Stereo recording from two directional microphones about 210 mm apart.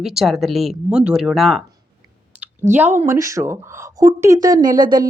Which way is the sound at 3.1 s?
15° right (ahead or behind).